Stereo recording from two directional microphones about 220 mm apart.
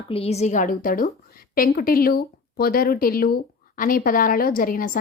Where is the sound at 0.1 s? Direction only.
30° left (ahead or behind).